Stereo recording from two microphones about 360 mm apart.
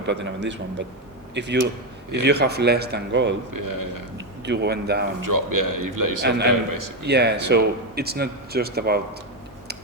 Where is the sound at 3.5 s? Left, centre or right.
Right.